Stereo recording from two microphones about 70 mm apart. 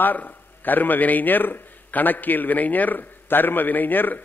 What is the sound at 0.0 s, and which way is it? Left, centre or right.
A man's voice, left.